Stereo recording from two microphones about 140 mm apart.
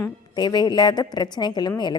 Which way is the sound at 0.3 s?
30° left (ahead or behind).